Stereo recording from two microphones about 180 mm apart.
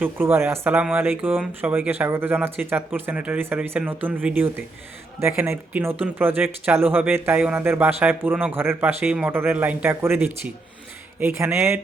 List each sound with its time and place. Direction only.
0.0 s speech: 10° right (ahead or behind)